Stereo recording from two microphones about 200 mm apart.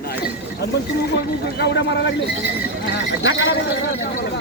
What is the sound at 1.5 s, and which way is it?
Speech, 55° left (ahead or behind).